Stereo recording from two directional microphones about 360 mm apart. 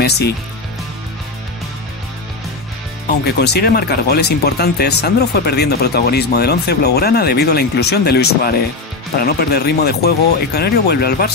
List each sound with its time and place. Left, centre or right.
3.1 s speech: left